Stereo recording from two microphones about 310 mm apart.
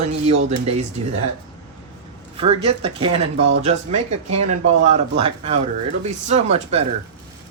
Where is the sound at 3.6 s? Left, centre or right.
Right.